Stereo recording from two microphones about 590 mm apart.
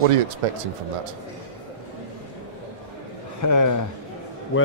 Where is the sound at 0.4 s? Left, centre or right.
Right.